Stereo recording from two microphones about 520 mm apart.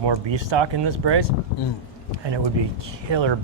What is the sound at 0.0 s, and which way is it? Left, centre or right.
Speech, right.